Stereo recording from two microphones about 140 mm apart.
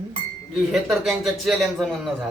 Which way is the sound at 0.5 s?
Centre (ahead or behind).